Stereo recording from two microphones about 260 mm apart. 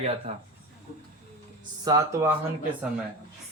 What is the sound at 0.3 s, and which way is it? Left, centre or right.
Speech, right.